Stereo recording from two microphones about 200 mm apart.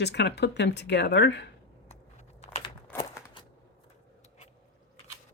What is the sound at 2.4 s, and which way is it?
Crunch, 30° left (ahead or behind).